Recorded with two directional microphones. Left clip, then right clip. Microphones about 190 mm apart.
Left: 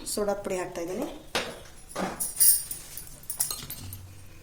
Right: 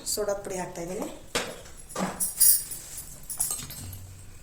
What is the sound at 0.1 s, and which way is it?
Speech, 50° left (ahead or behind).